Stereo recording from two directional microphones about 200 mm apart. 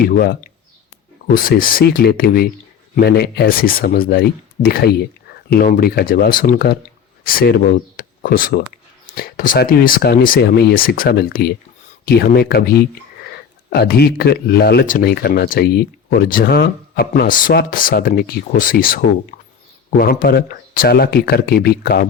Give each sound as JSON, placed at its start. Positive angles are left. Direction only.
{"t": 0.0, "sound": "speech", "side_deg": 45}